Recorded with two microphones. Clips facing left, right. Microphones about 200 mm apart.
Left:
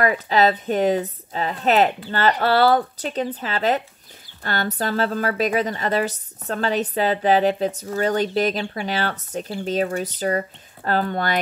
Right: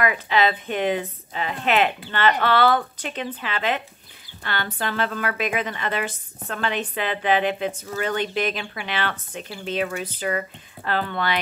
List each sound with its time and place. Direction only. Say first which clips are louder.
0.0 s speech: left 3 dB; 40° left (ahead or behind)